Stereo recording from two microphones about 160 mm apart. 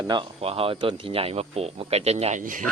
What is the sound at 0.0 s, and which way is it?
Speech, 25° right (ahead or behind).